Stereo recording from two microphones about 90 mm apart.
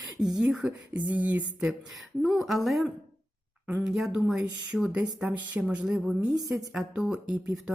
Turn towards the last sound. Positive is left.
turn(degrees=-10)  # may be behind; listen again after turning